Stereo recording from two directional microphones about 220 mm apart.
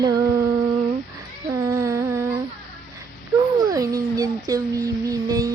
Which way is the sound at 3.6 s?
15° right (ahead or behind).